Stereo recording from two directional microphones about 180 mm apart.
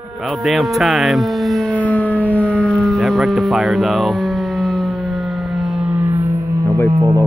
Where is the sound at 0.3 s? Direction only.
Centre (ahead or behind).